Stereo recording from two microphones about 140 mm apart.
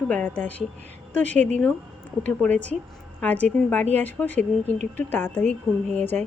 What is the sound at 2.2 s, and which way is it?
A woman's voice, 10° left (ahead or behind).